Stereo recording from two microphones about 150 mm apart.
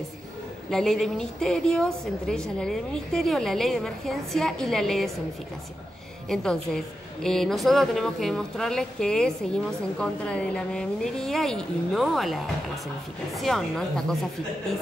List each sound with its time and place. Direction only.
0.7 s speech: 5° left (ahead or behind)
6.2 s speech: 5° left (ahead or behind)